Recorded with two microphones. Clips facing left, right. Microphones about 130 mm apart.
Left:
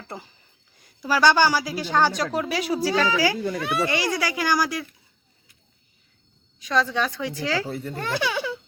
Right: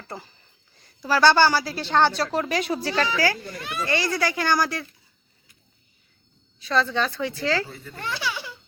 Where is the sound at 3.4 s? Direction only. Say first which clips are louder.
Left 7 dB; 65° left (ahead or behind).